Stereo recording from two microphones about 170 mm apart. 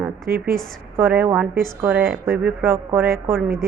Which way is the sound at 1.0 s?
10° right (ahead or behind).